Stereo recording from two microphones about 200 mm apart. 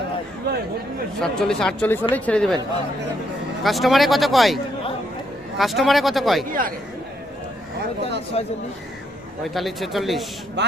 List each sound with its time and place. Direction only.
1.2 s speech: 5° left (ahead or behind)
3.6 s speech: centre (ahead or behind)
6.5 s a man's voice: 45° right (ahead or behind)
8.4 s speech: 30° left (ahead or behind)
9.4 s speech: centre (ahead or behind)
10.6 s a man's voice: 60° right (ahead or behind)